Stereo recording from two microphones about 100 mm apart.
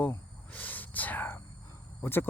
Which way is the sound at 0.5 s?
15° left (ahead or behind).